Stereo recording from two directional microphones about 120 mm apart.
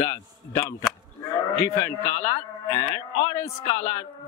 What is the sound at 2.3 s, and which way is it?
A man's voice, 40° left (ahead or behind).